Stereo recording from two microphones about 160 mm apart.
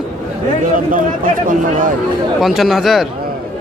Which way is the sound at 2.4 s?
Centre (ahead or behind).